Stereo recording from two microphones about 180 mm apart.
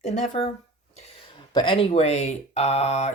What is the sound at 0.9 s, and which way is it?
Speech, 25° left (ahead or behind).